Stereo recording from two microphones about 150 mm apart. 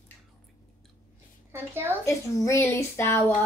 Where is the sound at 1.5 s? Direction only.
15° right (ahead or behind).